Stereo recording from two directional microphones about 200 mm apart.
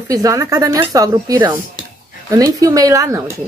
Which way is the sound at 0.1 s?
15° right (ahead or behind).